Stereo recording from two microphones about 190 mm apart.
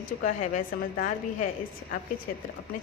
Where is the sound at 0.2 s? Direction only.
45° left (ahead or behind).